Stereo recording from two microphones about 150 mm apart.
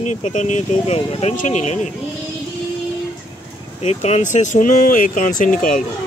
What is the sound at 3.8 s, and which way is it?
Speech, 45° left (ahead or behind).